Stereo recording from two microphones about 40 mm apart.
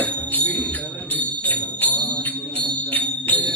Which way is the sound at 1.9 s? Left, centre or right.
Left.